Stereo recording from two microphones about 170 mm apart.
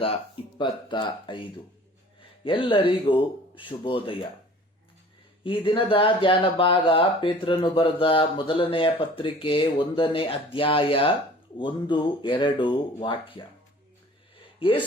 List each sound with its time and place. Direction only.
0.6 s speech: 25° left (ahead or behind)
2.4 s speech: 30° left (ahead or behind)
5.4 s speech: 30° left (ahead or behind)